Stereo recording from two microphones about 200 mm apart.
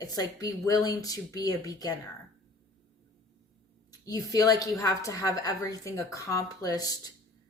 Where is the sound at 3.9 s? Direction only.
20° left (ahead or behind).